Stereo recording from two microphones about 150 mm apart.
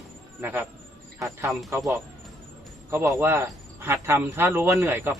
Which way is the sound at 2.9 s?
15° right (ahead or behind).